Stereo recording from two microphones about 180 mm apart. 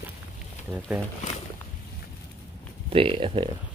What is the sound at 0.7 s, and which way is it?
Speech, 10° right (ahead or behind).